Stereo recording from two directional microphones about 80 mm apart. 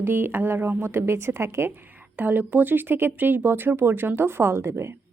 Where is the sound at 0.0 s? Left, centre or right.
Right.